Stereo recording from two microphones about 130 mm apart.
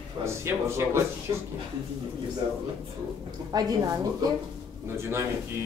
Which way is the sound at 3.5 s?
30° right (ahead or behind).